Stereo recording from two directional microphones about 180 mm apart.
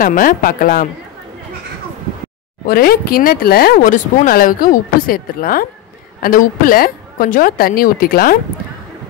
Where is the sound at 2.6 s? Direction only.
55° left (ahead or behind).